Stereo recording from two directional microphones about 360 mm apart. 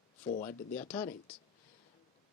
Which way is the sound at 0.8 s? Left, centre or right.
Centre.